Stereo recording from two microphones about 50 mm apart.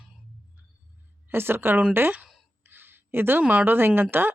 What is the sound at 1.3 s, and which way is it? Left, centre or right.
Speech, right.